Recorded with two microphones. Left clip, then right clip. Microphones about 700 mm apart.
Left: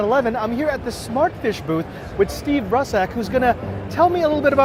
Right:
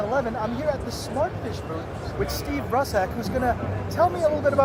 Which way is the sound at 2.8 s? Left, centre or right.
Left.